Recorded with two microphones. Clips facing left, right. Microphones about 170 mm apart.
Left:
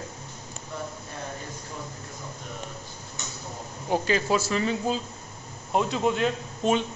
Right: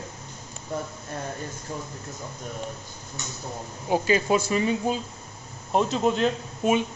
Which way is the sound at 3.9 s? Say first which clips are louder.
Right 2 dB; 15° right (ahead or behind).